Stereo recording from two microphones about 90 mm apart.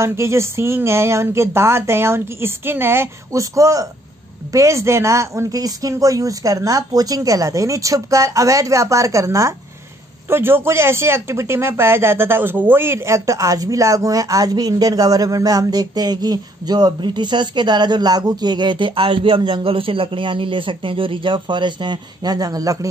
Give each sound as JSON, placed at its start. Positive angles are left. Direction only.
{"t": 0.0, "sound": "speech", "side_deg": -30}